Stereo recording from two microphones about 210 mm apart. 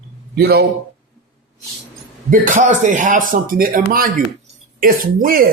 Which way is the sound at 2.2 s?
40° right (ahead or behind).